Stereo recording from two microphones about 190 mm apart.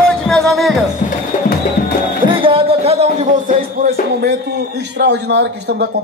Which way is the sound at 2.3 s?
30° right (ahead or behind).